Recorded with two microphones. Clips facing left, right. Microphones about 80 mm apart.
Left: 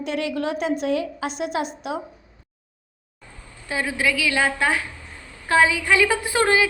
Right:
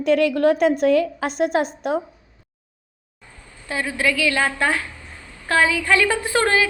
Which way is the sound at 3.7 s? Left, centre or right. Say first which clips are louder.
Right 1 dB; centre.